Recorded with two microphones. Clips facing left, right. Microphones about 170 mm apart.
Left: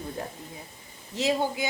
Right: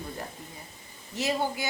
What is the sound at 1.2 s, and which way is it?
Speech, 20° left (ahead or behind).